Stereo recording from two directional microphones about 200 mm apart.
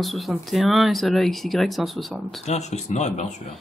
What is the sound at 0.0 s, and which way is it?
Speech, centre (ahead or behind).